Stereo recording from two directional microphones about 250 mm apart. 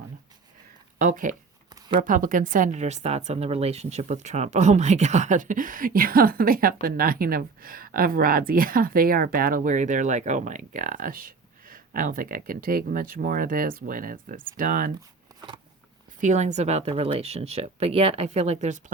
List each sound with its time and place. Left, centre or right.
0.9 s a woman's voice: right
15.4 s a sound: centre
16.2 s a woman's voice: right